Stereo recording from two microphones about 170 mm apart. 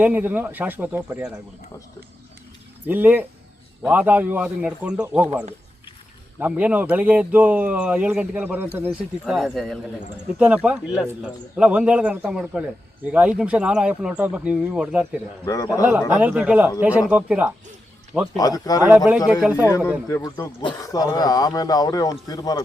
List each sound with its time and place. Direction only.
0.0 s speech: 10° right (ahead or behind)
2.8 s speech: 10° right (ahead or behind)
6.4 s speech: 10° right (ahead or behind)
15.4 s speech: 20° left (ahead or behind)
15.8 s speech: 10° right (ahead or behind)
18.3 s speech: 20° left (ahead or behind)
18.9 s speech: 5° right (ahead or behind)
19.6 s speech: 15° left (ahead or behind)